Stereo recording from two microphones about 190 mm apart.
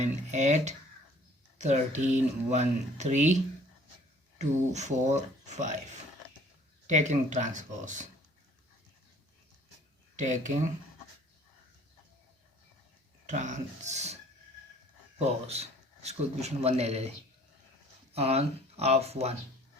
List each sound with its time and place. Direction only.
0.0 s speech: 40° right (ahead or behind)
4.4 s speech: 35° right (ahead or behind)
6.8 s speech: 40° right (ahead or behind)
10.2 s speech: 40° right (ahead or behind)
13.2 s speech: 40° right (ahead or behind)
15.2 s a man's voice: 35° right (ahead or behind)
18.1 s speech: 35° right (ahead or behind)